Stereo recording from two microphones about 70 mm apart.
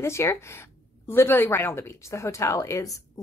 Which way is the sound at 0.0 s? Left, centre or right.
Left.